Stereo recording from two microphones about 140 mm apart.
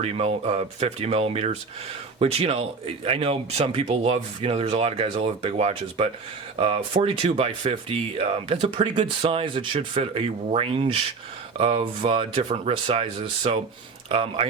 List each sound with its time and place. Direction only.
0.0 s speech: 45° right (ahead or behind)